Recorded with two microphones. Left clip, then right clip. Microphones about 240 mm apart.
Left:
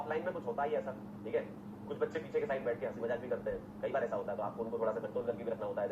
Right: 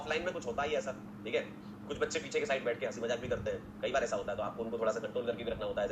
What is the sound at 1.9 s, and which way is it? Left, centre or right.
Speech, right.